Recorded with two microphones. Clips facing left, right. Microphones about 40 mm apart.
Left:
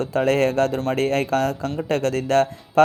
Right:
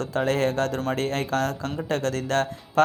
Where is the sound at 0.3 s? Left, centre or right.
Left.